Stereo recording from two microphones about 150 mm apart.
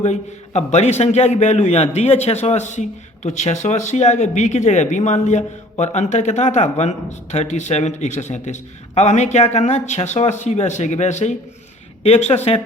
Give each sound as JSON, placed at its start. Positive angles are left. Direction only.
{"t": 0.0, "sound": "speech", "side_deg": 50}